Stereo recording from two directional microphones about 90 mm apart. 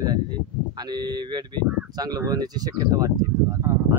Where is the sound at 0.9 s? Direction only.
55° right (ahead or behind).